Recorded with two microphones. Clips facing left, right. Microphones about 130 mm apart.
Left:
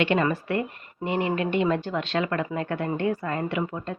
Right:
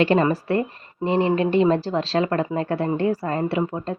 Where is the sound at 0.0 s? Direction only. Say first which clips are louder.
Right 5 dB; 35° right (ahead or behind).